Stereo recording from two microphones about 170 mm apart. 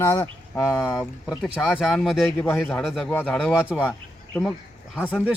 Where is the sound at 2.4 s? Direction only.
10° left (ahead or behind).